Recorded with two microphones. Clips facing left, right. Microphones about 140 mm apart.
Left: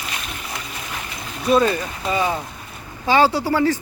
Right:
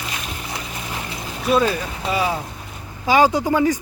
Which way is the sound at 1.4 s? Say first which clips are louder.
Left 1 dB; 5° right (ahead or behind).